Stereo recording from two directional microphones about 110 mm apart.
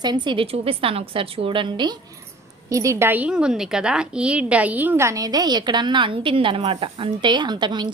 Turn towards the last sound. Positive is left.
turn(degrees=-45)  # may be behind; listen again after turning